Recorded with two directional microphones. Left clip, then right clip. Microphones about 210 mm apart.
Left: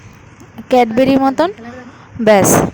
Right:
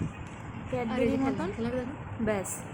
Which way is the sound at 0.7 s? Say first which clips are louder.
Left 19 dB; 50° left (ahead or behind).